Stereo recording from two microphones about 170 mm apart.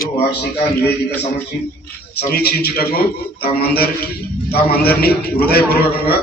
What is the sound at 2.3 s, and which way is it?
A man's voice, 70° left (ahead or behind).